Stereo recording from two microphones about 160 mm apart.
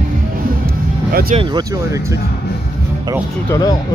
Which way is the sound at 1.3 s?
30° right (ahead or behind).